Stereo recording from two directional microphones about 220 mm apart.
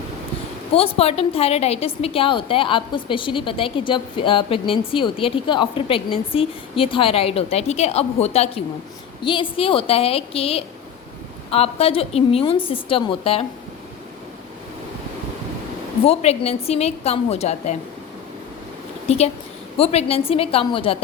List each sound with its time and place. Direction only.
0.7 s a woman's voice: 25° left (ahead or behind)
16.0 s a woman's voice: 30° left (ahead or behind)
19.0 s a woman's voice: 30° left (ahead or behind)